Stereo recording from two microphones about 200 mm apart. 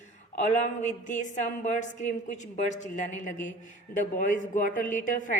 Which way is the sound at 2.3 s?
35° left (ahead or behind).